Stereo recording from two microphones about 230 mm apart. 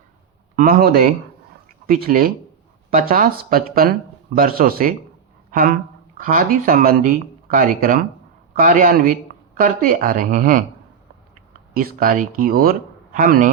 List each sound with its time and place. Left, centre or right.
0.5 s speech: right
11.7 s speech: right